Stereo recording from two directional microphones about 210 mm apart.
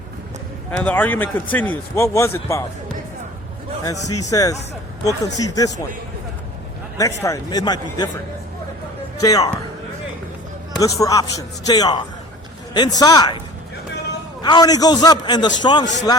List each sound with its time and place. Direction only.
0.8 s a man's voice: 5° left (ahead or behind)
4.0 s speech: 90° left
4.3 s a man's voice: 15° left (ahead or behind)
7.0 s a man's voice: 15° left (ahead or behind)
9.2 s a man's voice: 15° left (ahead or behind)
10.8 s a man's voice: 15° left (ahead or behind)
14.4 s a man's voice: 20° left (ahead or behind)